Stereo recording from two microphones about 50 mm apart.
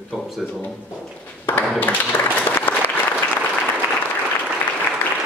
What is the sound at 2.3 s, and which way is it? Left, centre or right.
Applause, left.